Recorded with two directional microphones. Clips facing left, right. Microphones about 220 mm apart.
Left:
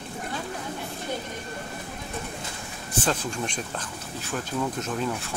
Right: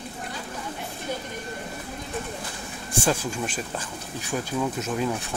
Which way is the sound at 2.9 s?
10° right (ahead or behind).